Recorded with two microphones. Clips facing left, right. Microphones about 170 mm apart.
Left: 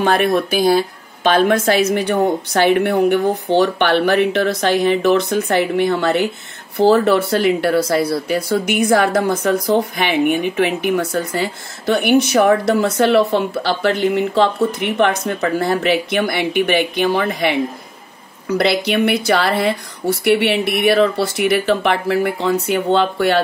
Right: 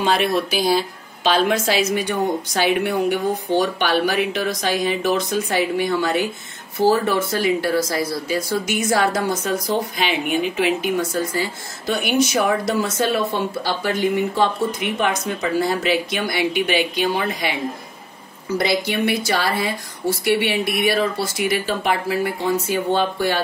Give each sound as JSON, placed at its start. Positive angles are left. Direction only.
{"t": 0.0, "sound": "speech", "side_deg": 50}